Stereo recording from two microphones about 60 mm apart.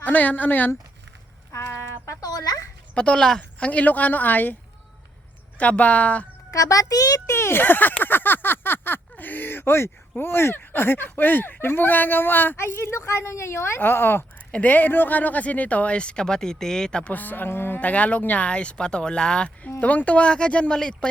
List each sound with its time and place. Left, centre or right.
0.0 s speech: left
2.2 s a sound: left
2.9 s speech: centre
3.6 s speech: left
5.5 s speech: left
6.5 s a child's voice: left
7.3 s speech: left; by 17.1 s centre
17.1 s speech: left
17.7 s speech: left